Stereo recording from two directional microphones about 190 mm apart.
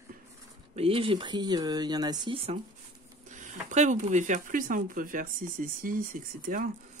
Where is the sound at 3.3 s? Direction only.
40° right (ahead or behind).